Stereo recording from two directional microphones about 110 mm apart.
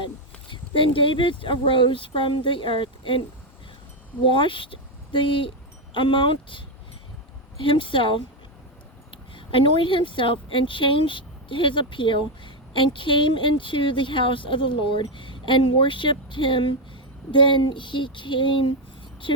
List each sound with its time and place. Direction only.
0.0 s speech: 50° left (ahead or behind)
7.6 s speech: 50° left (ahead or behind)
9.3 s speech: 55° left (ahead or behind)